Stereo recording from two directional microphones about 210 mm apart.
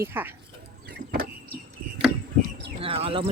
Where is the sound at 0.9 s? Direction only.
45° right (ahead or behind).